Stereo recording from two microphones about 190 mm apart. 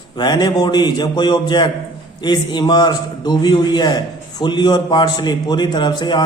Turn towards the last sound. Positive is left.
turn(degrees=25)  # may be behind; listen again after turning